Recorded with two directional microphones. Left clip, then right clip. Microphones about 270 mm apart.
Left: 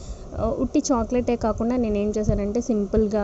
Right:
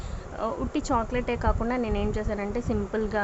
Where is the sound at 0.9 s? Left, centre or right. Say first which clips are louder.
Left 1 dB; centre.